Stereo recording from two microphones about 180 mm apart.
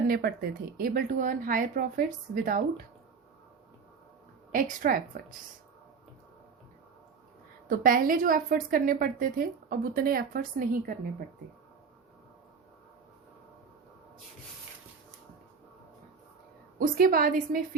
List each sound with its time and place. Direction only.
0.1 s a woman's voice: 55° right (ahead or behind)
4.5 s a woman's voice: 50° right (ahead or behind)
7.7 s a woman's voice: 55° right (ahead or behind)
16.7 s a woman's voice: 50° right (ahead or behind)